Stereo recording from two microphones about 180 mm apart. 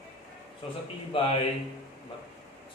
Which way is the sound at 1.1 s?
30° left (ahead or behind).